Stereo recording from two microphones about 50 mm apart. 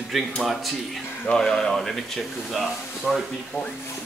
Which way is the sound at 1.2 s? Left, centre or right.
Centre.